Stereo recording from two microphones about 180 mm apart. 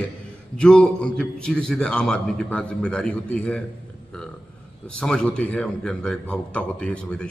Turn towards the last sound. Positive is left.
turn(degrees=5)  # may be behind; listen again after turning